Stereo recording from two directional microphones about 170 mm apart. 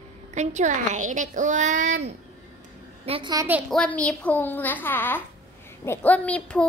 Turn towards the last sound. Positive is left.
turn(degrees=10)  # may be behind; listen again after turning